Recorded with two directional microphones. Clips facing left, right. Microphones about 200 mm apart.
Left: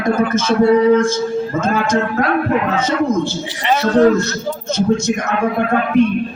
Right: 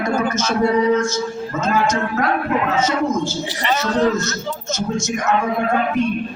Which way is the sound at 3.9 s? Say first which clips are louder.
Left 7 dB; 55° left (ahead or behind).